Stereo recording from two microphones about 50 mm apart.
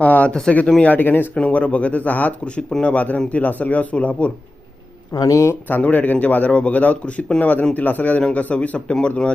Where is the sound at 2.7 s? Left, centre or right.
Left.